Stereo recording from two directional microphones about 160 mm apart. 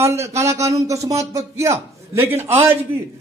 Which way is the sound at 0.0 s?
20° right (ahead or behind).